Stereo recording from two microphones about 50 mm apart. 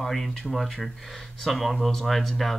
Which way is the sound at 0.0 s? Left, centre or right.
Centre.